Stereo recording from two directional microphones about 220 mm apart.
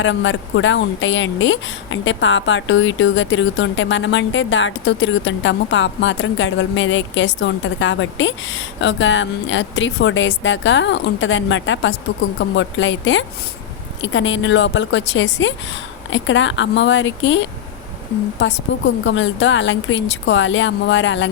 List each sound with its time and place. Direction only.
0.0 s a woman's voice: 55° left (ahead or behind)